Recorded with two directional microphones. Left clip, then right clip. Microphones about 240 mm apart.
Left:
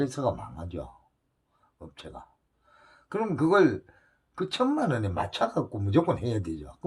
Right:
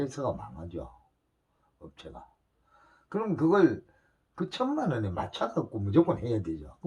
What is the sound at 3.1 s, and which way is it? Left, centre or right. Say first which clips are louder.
Speech: left 2 dB; left.